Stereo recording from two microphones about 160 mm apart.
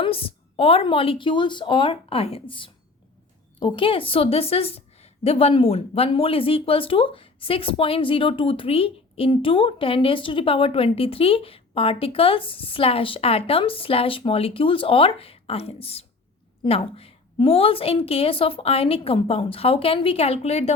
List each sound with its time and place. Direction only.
0.0 s speech: 35° left (ahead or behind)